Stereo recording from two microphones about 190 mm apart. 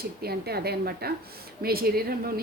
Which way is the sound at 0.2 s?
55° right (ahead or behind).